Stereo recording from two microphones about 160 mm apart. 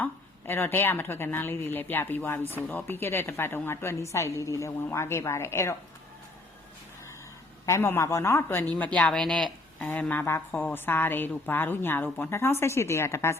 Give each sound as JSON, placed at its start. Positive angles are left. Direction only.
{"t": 0.0, "sound": "speech", "side_deg": 15}
{"t": 7.6, "sound": "speech", "side_deg": 15}